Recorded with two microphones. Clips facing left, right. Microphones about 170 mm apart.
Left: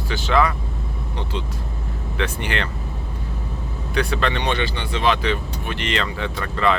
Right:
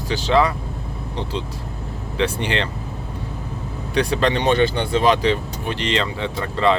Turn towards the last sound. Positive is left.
turn(degrees=-25)  # may be behind; listen again after turning